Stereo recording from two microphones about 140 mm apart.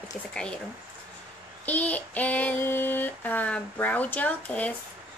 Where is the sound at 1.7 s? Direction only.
10° left (ahead or behind).